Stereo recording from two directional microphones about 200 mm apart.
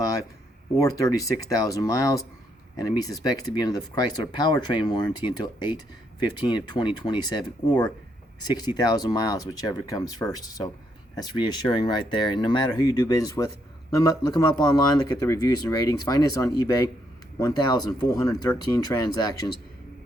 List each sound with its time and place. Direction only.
0.8 s speech: 15° left (ahead or behind)
8.5 s speech: 20° left (ahead or behind)